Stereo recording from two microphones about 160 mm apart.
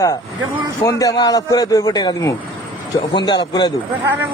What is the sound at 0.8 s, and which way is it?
A man's voice, 20° left (ahead or behind).